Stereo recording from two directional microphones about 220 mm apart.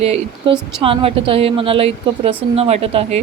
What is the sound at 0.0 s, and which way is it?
Speech, 25° right (ahead or behind).